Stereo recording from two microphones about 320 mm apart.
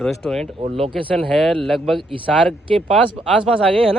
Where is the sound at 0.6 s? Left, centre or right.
Centre.